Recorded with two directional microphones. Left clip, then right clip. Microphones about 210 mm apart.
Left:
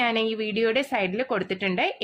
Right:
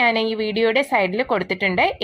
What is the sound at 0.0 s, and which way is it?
A woman's voice, 15° right (ahead or behind).